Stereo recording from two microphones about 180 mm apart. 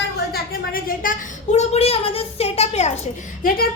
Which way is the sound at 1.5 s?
35° left (ahead or behind).